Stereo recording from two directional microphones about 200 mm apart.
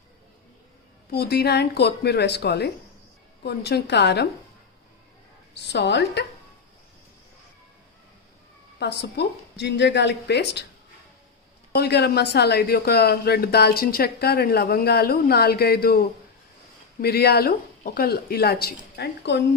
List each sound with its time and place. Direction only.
1.1 s a woman's voice: 50° left (ahead or behind)
5.5 s a woman's voice: 55° left (ahead or behind)
8.8 s a woman's voice: 60° left (ahead or behind)
11.8 s a woman's voice: 55° left (ahead or behind)